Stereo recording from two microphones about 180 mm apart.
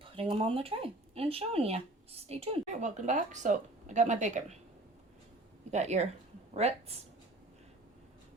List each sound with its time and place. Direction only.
0.0 s speech: 30° right (ahead or behind)
5.7 s speech: 40° right (ahead or behind)